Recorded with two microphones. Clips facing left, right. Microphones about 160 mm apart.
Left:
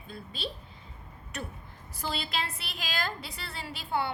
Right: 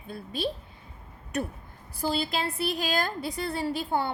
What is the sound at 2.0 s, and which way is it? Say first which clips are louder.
A woman's voice: right 6 dB; 40° right (ahead or behind).